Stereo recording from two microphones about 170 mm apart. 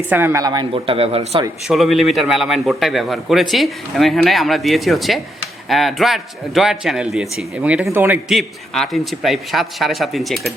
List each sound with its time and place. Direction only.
0.1 s speech: 15° right (ahead or behind); by 1.5 s 35° right (ahead or behind)
1.6 s a man's voice: centre (ahead or behind)